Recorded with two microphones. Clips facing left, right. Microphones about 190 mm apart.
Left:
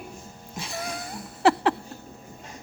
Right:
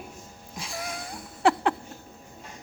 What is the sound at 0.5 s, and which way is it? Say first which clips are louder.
Cat: left 2 dB; centre (ahead or behind).